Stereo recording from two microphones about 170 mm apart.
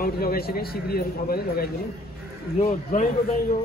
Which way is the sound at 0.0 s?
60° left (ahead or behind).